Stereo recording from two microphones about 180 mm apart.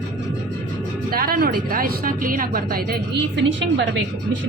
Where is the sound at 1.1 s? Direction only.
55° right (ahead or behind); by 3.9 s 90° right.